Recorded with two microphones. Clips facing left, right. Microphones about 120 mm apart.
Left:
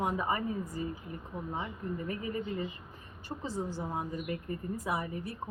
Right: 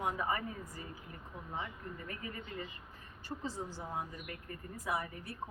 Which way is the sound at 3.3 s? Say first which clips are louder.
Left 5 dB; 30° left (ahead or behind).